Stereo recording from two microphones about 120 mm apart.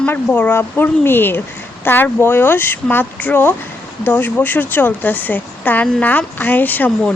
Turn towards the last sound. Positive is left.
turn(degrees=15)  # may be behind; listen again after turning